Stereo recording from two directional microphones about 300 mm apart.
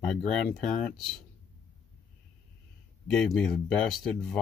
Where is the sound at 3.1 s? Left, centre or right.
Centre.